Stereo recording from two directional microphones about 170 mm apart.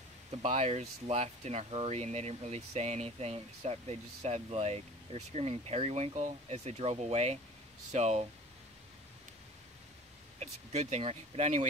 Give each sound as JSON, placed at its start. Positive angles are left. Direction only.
{"t": 0.4, "sound": "speech", "side_deg": -40}
{"t": 10.4, "sound": "speech", "side_deg": -40}